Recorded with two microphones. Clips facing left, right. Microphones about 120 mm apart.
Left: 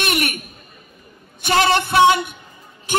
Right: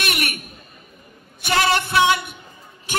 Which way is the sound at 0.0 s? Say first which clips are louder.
Left 4 dB; 30° left (ahead or behind).